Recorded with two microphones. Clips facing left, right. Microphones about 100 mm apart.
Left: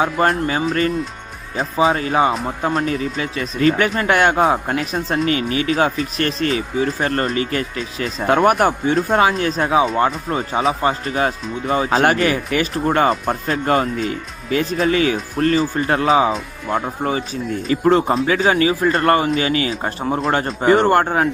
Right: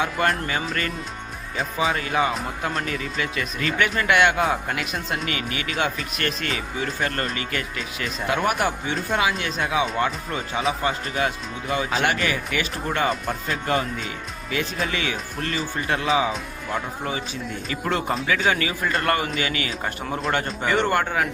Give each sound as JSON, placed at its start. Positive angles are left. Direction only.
{"t": 0.0, "sound": "speech", "side_deg": 35}
{"t": 8.4, "sound": "speech", "side_deg": 50}